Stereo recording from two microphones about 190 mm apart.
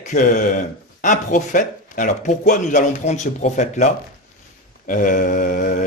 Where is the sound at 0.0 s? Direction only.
40° left (ahead or behind).